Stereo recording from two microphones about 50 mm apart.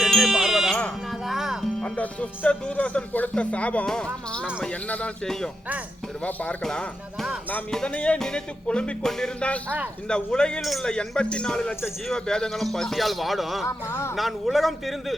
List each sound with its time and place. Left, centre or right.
0.0 s sheep: centre
1.3 s music: centre
2.5 s music: left
3.8 s speech: centre
4.9 s music: left
5.2 s speech: centre
6.2 s music: left
6.6 s speech: centre
7.9 s music: left
9.0 s speech: centre
9.4 s music: left
10.1 s a man's voice: centre
13.7 s speech: left
14.2 s a man's voice: centre